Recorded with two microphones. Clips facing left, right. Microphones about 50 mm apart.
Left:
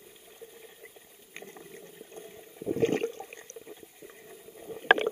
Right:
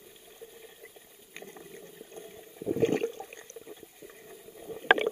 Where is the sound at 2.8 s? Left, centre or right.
Left.